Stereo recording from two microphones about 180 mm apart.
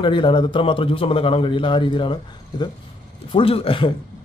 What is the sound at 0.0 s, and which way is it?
A man's voice, 25° left (ahead or behind).